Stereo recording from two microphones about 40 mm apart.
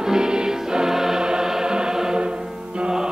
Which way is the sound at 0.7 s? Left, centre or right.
Centre.